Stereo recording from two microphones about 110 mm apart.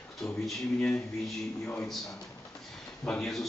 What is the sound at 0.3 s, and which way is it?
Speech, 5° left (ahead or behind).